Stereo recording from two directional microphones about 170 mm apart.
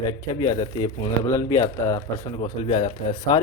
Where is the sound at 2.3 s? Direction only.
30° left (ahead or behind).